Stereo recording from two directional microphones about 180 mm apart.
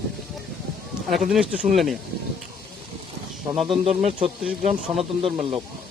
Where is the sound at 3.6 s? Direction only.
35° right (ahead or behind).